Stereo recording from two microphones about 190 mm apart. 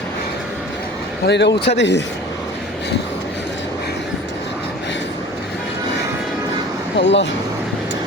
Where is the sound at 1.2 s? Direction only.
65° left (ahead or behind).